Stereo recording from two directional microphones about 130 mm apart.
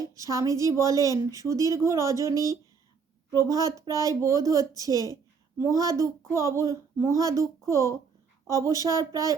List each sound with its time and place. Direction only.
0.1 s speech: 25° right (ahead or behind)